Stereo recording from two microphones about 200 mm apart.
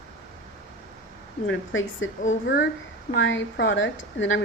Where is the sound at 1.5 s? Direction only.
70° left (ahead or behind).